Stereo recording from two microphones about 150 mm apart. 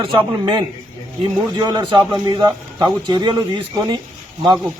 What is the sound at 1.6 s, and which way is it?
Speech, 30° right (ahead or behind).